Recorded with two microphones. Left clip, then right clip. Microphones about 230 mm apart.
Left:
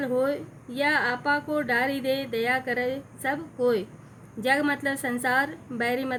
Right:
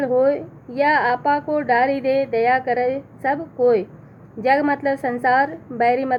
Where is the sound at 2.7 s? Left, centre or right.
Left.